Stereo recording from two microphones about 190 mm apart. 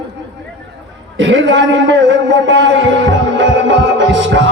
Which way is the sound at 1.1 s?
70° right (ahead or behind).